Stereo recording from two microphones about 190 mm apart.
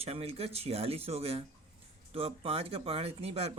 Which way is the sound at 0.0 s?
30° right (ahead or behind).